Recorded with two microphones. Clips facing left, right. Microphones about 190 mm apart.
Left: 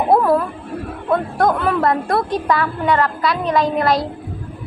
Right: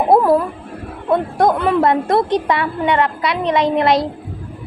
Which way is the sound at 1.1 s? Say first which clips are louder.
Right 2 dB; 20° right (ahead or behind).